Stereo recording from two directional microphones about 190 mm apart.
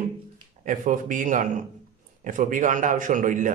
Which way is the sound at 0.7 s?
45° right (ahead or behind).